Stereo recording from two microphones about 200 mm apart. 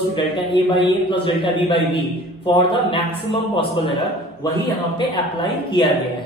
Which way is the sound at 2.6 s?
25° left (ahead or behind).